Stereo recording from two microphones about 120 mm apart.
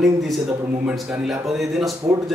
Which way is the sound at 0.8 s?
5° right (ahead or behind).